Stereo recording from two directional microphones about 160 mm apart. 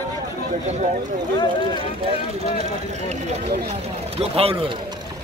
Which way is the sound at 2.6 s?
45° right (ahead or behind).